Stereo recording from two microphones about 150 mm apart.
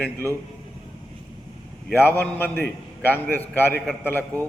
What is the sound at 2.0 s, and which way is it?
A man's voice, 10° left (ahead or behind).